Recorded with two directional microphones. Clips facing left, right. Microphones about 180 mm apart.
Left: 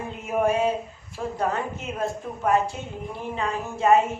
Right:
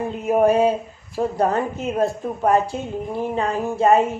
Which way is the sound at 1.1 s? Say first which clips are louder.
Right 7 dB; 35° right (ahead or behind).